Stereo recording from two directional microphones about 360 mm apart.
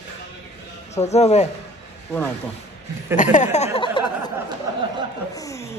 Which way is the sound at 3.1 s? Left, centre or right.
Centre.